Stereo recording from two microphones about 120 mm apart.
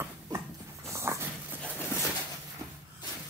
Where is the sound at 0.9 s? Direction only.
25° right (ahead or behind).